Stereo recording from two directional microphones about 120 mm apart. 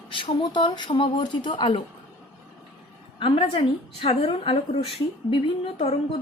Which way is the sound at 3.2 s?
55° left (ahead or behind).